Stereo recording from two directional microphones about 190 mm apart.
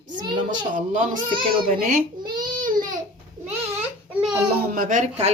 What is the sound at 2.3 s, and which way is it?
Baby cry, 20° right (ahead or behind).